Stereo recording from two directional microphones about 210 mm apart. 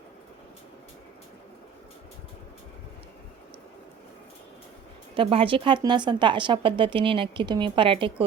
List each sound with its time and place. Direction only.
5.1 s speech: 25° right (ahead or behind)